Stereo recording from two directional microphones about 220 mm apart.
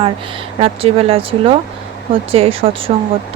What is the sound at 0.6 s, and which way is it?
Speech, 25° right (ahead or behind).